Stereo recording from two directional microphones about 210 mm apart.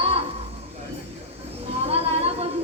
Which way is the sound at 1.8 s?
30° right (ahead or behind).